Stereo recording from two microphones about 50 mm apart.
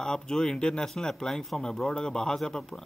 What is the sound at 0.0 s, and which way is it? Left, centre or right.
Speech, centre.